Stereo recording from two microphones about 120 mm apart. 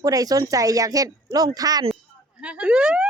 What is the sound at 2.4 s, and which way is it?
Speech, 10° right (ahead or behind).